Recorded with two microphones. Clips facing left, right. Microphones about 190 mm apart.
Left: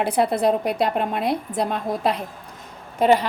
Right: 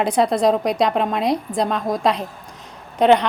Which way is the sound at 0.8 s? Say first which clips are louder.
Right 3 dB; 80° right.